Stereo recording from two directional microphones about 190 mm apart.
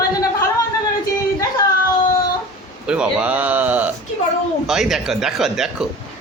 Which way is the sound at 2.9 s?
5° right (ahead or behind).